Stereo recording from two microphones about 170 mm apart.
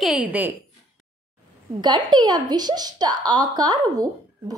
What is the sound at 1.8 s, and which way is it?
A woman's voice, 25° right (ahead or behind).